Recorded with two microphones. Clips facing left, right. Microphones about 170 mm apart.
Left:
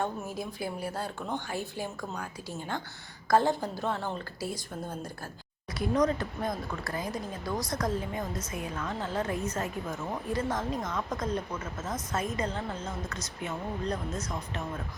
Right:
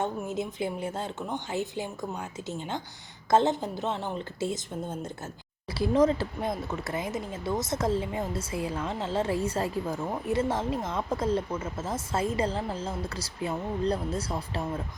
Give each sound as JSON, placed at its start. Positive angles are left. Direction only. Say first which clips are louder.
{"t": 0.0, "sound": "speech", "louder": "right 3 dB", "side_deg": -20}